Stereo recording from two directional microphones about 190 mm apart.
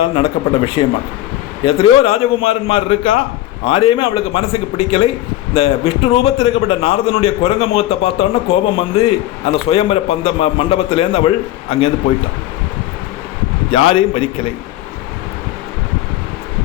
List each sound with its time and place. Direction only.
0.2 s a man's voice: 30° left (ahead or behind)
13.7 s a man's voice: 30° left (ahead or behind)